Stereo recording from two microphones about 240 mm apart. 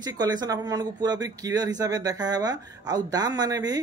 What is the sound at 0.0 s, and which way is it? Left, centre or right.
Speech, centre.